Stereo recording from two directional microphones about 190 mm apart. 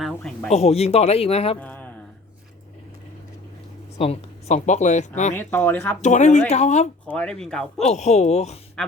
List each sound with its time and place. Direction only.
0.0 s speech: centre (ahead or behind)
0.5 s speech: 35° left (ahead or behind)
1.5 s speech: 10° left (ahead or behind)
3.9 s speech: 30° left (ahead or behind)
5.3 s speech: 10° left (ahead or behind)
6.0 s speech: 40° left (ahead or behind)
7.1 s a man's voice: 5° left (ahead or behind)
7.9 s speech: 35° left (ahead or behind)
8.8 s a sound: 5° left (ahead or behind)